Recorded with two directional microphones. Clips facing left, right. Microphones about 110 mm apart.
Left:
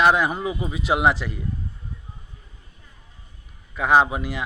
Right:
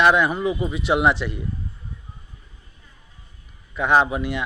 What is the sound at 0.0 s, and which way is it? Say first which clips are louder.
Speech: right 1 dB; 35° left (ahead or behind).